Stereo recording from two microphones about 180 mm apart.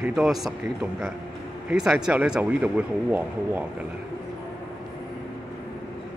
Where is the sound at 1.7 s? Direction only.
5° right (ahead or behind).